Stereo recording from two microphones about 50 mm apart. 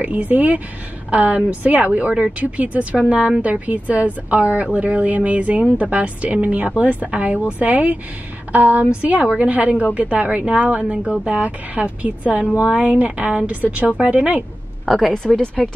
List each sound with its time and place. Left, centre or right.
0.0 s a woman's voice: right
14.9 s speech: centre
15.3 s speech: centre